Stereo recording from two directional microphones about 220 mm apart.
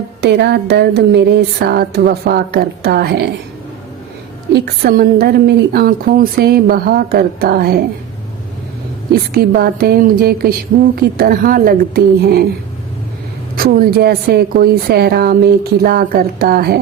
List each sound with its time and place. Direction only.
0.2 s a woman's voice: 50° right (ahead or behind)
4.5 s a woman's voice: 45° right (ahead or behind)
9.1 s a woman's voice: 45° right (ahead or behind)
13.6 s a woman's voice: 40° right (ahead or behind)